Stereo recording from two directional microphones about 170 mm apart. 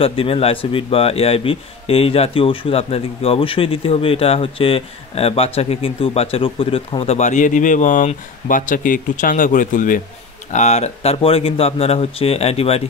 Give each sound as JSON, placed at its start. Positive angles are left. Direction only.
{"t": 0.0, "sound": "a man's voice", "side_deg": 35}